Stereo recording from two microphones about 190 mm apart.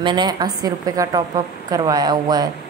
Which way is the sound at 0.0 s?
25° right (ahead or behind).